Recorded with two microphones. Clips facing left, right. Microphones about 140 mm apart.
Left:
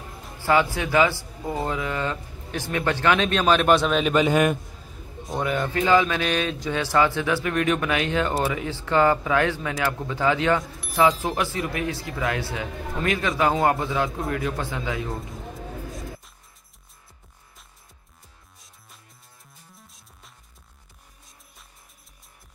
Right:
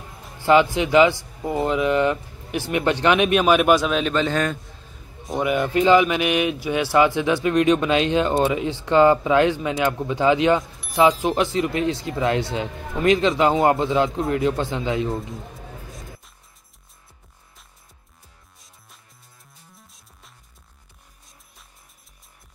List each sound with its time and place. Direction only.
0.5 s speech: 20° right (ahead or behind); by 4.1 s centre (ahead or behind)
4.1 s a man's voice: 10° left (ahead or behind)
5.4 s speech: 15° right (ahead or behind)
15.9 s music: centre (ahead or behind)
19.7 s music: centre (ahead or behind)